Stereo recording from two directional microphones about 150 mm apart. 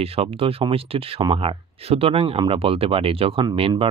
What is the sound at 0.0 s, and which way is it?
Speech, 40° right (ahead or behind).